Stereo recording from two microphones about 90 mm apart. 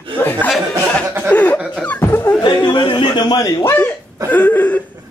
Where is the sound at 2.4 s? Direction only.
60° left (ahead or behind).